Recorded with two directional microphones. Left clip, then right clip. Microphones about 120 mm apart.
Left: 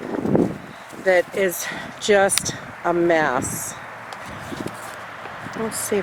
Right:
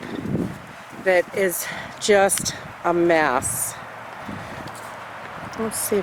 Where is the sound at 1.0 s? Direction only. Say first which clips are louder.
Left 1 dB; 10° right (ahead or behind).